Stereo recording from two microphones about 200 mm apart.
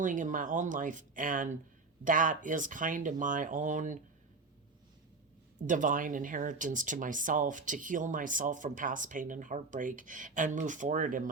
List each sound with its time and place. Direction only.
0.0 s speech: 40° right (ahead or behind)
5.6 s speech: 40° right (ahead or behind)